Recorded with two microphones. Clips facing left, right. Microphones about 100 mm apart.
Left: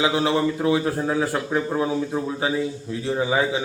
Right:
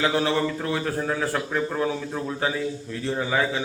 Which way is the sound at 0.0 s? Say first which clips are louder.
Left 2 dB; 15° left (ahead or behind).